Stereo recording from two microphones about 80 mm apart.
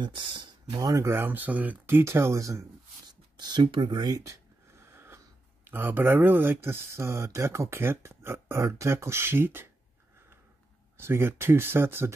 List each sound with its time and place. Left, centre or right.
0.0 s speech: right
0.7 s speech: right
1.0 s speech: right
3.1 s speech: right
4.3 s wheeze: right
5.7 s speech: right
11.0 s speech: right